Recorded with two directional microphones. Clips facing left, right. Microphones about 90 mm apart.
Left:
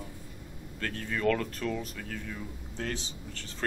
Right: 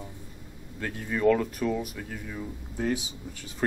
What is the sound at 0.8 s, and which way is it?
Speech, 15° right (ahead or behind).